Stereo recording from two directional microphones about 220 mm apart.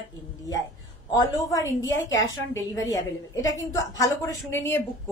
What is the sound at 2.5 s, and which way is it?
A woman's voice, 15° left (ahead or behind).